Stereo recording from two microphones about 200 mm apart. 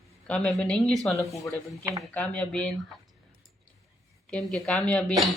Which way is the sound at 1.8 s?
15° right (ahead or behind).